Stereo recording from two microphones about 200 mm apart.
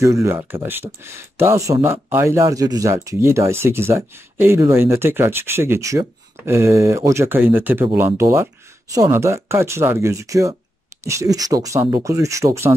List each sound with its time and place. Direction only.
0.0 s speech: 15° right (ahead or behind)